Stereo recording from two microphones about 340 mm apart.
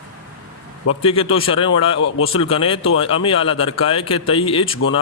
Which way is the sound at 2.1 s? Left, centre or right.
Left.